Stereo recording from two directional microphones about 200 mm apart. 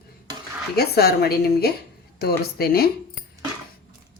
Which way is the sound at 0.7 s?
50° left (ahead or behind).